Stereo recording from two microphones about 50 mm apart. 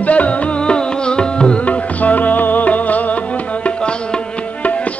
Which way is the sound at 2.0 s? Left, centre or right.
Left.